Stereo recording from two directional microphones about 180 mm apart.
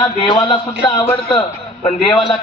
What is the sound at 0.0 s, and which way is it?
A man's voice, 25° left (ahead or behind).